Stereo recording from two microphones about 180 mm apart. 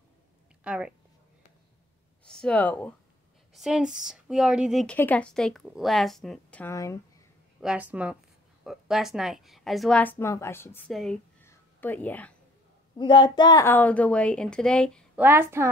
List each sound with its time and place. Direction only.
0.7 s a woman's voice: 5° right (ahead or behind)
2.2 s speech: 5° left (ahead or behind)
3.5 s a woman's voice: 5° right (ahead or behind)
4.9 s a woman's voice: 10° left (ahead or behind)
6.6 s a woman's voice: 15° left (ahead or behind)
7.6 s a woman's voice: 10° right (ahead or behind); by 10.9 s 10° left (ahead or behind)
10.9 s a woman's voice: centre (ahead or behind)
11.4 s a sound: 10° left (ahead or behind)
12.9 s a woman's voice: 25° left (ahead or behind); by 15.0 s 5° left (ahead or behind)
15.1 s speech: 10° right (ahead or behind)